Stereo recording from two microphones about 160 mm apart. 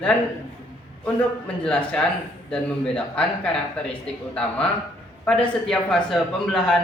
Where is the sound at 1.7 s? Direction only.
5° left (ahead or behind).